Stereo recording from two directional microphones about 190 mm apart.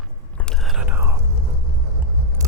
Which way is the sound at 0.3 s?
5° left (ahead or behind).